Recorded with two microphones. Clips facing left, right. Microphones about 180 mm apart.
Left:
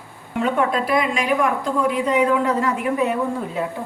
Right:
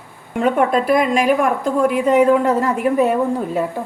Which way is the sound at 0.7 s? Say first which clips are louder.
Right 5 dB; 50° right (ahead or behind).